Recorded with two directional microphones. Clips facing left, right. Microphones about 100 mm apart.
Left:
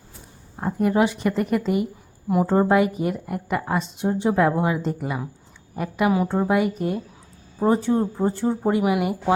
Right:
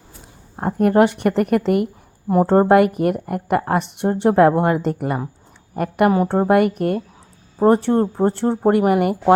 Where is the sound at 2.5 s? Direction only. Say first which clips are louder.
Right 6 dB; 60° right (ahead or behind).